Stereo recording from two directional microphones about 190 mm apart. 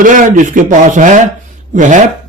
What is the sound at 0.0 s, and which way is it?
Speech, 45° right (ahead or behind).